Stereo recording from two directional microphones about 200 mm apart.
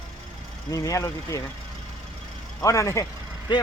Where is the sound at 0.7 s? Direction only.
15° left (ahead or behind).